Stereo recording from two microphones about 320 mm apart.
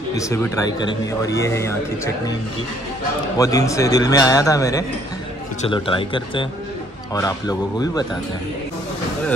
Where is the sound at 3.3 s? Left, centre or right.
Centre.